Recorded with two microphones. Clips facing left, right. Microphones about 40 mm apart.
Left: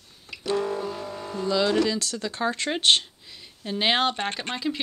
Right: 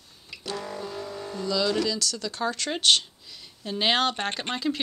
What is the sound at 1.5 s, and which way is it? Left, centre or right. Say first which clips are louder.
Speech: left 3 dB; left.